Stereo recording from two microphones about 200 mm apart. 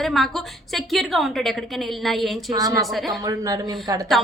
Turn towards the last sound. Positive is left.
turn(degrees=-20)  # may be behind; listen again after turning